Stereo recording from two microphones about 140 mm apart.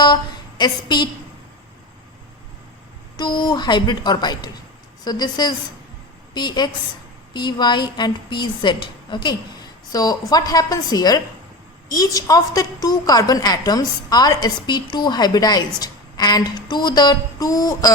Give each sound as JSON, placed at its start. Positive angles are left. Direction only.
{"t": 0.6, "sound": "a woman's voice", "side_deg": 30}
{"t": 3.2, "sound": "a woman's voice", "side_deg": 30}